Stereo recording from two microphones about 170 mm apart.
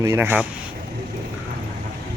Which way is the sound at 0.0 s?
15° right (ahead or behind).